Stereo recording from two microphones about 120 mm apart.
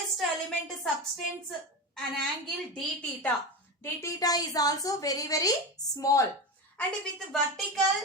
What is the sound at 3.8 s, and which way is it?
A woman's voice, 30° left (ahead or behind).